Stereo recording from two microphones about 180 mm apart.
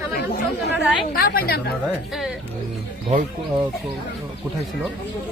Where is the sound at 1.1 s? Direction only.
55° left (ahead or behind).